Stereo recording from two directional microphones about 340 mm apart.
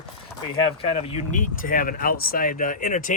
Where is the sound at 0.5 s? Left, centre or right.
Centre.